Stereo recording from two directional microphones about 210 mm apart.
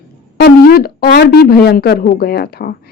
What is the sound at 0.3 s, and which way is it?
Speech, 45° left (ahead or behind).